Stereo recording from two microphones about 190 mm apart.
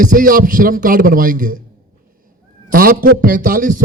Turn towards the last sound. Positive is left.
turn(degrees=-45)  # may be behind; listen again after turning